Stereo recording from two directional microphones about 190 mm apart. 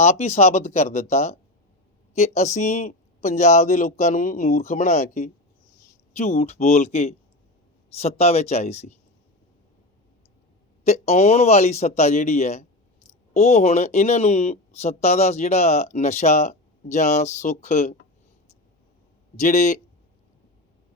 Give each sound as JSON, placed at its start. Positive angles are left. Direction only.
{"t": 0.0, "sound": "speech", "side_deg": 35}
{"t": 10.8, "sound": "speech", "side_deg": 35}
{"t": 19.4, "sound": "speech", "side_deg": 40}